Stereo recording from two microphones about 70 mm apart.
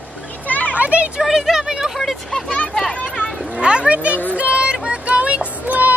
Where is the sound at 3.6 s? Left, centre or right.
Centre.